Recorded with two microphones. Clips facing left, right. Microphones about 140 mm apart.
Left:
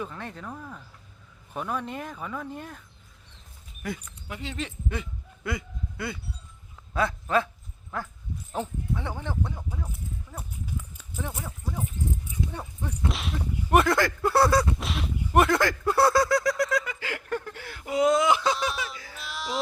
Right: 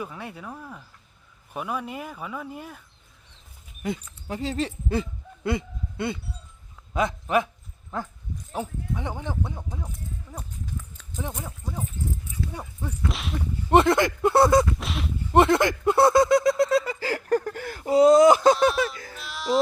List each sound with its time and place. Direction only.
0.0 s speech: 10° right (ahead or behind)
3.8 s speech: 20° right (ahead or behind)
4.3 s speech: 35° right (ahead or behind); by 9.6 s 15° right (ahead or behind)
9.9 s clip-clop: 10° left (ahead or behind)
11.4 s speech: 15° right (ahead or behind)
13.7 s speech: 25° right (ahead or behind)
14.8 s speech: centre (ahead or behind)
15.3 s a sound: 25° right (ahead or behind); by 18.5 s 40° right (ahead or behind)
18.8 s speech: 55° right (ahead or behind)
19.1 s a sound: centre (ahead or behind)